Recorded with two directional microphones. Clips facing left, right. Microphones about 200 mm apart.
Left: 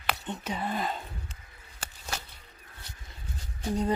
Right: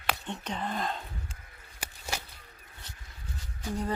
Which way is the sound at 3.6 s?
20° left (ahead or behind).